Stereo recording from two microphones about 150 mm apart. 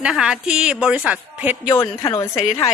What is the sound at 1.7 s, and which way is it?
Speech, 20° left (ahead or behind).